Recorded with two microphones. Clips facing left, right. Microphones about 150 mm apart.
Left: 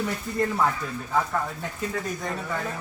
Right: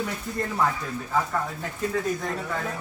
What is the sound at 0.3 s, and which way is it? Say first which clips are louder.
Speech: left 3 dB; centre (ahead or behind).